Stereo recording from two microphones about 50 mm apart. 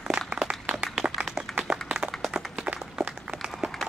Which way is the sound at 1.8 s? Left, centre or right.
Centre.